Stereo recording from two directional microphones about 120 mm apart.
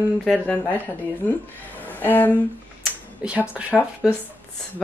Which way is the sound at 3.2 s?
10° right (ahead or behind).